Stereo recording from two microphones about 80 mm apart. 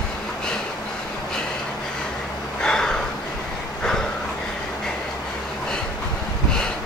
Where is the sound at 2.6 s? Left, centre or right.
Centre.